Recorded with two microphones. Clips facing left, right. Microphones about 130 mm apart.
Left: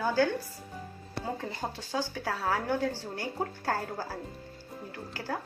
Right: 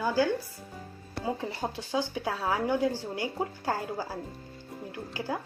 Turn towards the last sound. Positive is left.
turn(degrees=-15)  # may be behind; listen again after turning